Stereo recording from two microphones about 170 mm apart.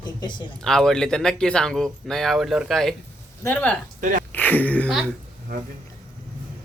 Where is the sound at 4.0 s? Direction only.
50° right (ahead or behind).